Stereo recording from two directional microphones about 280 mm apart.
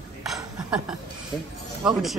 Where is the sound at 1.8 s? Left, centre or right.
Centre.